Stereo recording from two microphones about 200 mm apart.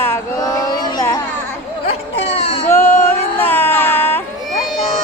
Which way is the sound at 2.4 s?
30° left (ahead or behind).